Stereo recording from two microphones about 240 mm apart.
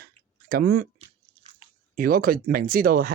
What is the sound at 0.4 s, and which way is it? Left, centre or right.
Speech, right.